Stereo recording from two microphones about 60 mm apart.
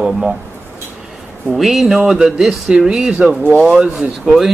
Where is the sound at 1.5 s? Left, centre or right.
Centre.